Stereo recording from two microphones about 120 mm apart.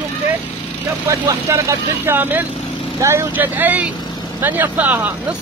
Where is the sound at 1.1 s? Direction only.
25° right (ahead or behind).